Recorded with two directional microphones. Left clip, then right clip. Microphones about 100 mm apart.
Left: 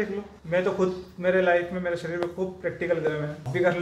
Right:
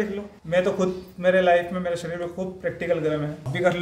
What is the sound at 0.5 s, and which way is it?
A man's voice, 15° right (ahead or behind).